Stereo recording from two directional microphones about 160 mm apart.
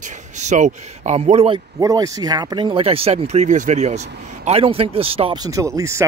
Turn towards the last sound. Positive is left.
turn(degrees=-20)  # may be behind; listen again after turning